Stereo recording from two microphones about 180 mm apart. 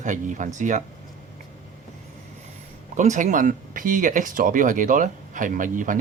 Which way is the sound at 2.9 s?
45° right (ahead or behind).